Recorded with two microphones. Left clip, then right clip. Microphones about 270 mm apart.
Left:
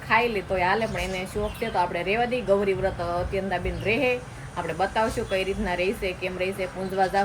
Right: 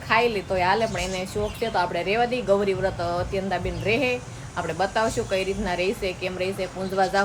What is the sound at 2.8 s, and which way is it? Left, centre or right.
Speech, centre.